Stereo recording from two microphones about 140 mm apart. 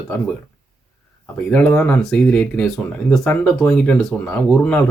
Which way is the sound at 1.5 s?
10° left (ahead or behind).